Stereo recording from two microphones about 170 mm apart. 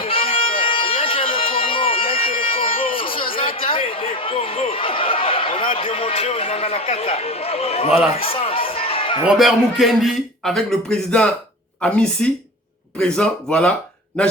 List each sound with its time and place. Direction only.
0.0 s music: 35° left (ahead or behind)
3.0 s a sound: 30° left (ahead or behind)
8.2 s speech: 35° left (ahead or behind)
9.2 s a man's voice: centre (ahead or behind)